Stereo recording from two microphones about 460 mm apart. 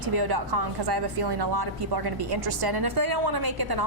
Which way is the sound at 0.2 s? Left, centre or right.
Right.